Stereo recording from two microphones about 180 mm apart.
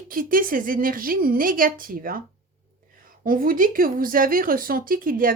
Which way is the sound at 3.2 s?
50° right (ahead or behind).